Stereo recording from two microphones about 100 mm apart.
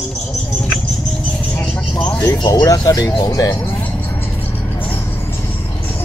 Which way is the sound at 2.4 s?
40° left (ahead or behind).